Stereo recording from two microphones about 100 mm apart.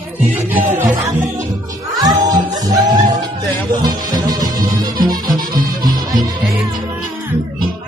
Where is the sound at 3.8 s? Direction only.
40° right (ahead or behind).